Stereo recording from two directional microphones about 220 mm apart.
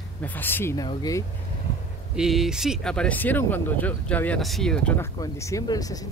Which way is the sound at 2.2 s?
Centre (ahead or behind).